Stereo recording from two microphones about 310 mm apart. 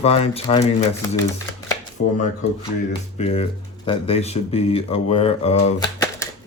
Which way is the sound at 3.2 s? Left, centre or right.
Centre.